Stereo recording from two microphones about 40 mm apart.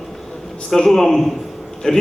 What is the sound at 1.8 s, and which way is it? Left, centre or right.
Speech, left.